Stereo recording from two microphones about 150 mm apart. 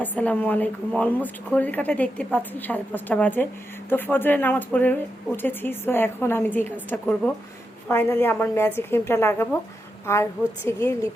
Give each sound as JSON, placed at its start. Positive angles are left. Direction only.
{"t": 0.0, "sound": "speech", "side_deg": 10}